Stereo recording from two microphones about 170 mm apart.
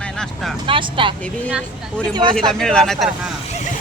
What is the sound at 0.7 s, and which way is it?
Speech, 30° right (ahead or behind).